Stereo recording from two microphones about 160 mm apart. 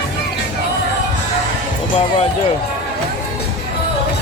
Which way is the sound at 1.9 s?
35° left (ahead or behind).